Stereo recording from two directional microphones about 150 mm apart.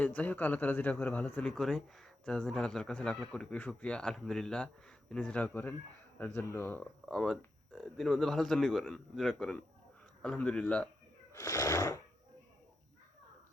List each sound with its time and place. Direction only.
0.0 s a man's voice: 10° left (ahead or behind)
7.0 s a man's voice: 5° left (ahead or behind)
11.3 s cat: 20° left (ahead or behind)